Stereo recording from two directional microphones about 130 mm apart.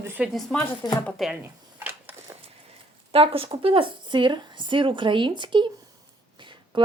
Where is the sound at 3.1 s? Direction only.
45° right (ahead or behind).